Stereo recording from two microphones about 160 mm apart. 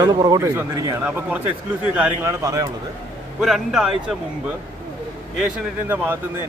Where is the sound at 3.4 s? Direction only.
Centre (ahead or behind).